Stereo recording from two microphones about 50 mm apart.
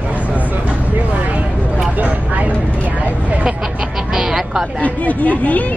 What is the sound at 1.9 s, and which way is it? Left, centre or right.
Vehicle, right.